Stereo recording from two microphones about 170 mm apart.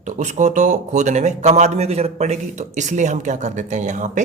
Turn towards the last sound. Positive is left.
turn(degrees=-45)  # may be behind; listen again after turning